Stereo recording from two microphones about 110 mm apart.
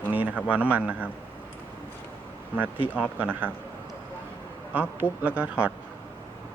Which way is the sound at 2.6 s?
15° right (ahead or behind).